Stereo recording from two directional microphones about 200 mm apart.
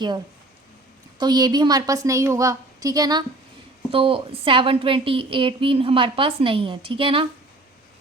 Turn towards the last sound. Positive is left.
turn(degrees=-25)  # may be behind; listen again after turning